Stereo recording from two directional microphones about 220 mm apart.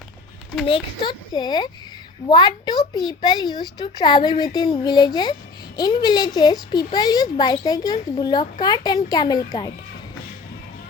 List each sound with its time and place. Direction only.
0.6 s a woman's voice: 20° left (ahead or behind)